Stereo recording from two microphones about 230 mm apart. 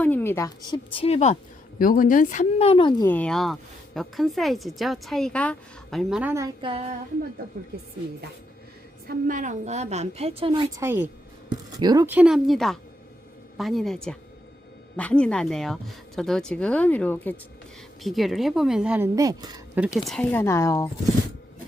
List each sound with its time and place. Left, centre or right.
0.0 s a woman's voice: centre
3.1 s a woman's voice: centre; by 6.9 s right
9.0 s a woman's voice: right; by 19.8 s centre
19.9 s speech: centre